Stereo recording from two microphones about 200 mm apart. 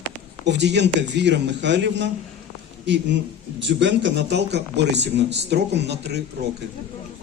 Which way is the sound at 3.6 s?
65° right (ahead or behind).